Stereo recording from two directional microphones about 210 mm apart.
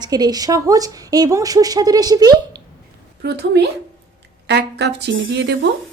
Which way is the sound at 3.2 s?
50° right (ahead or behind).